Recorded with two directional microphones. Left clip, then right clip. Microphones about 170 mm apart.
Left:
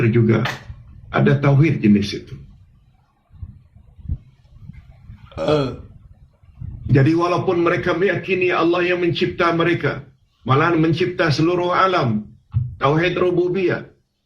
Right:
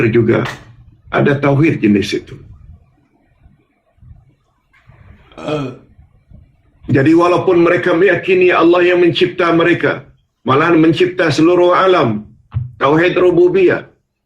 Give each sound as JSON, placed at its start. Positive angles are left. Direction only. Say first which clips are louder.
{"t": 0.0, "sound": "a man's voice", "louder": "right 6 dB", "side_deg": -45}
{"t": 5.3, "sound": "burping", "louder": "left 2 dB", "side_deg": 30}
{"t": 6.8, "sound": "a man's voice", "louder": "right 7 dB", "side_deg": -45}